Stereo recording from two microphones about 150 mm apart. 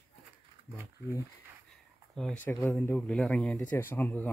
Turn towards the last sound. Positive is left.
turn(degrees=10)  # may be behind; listen again after turning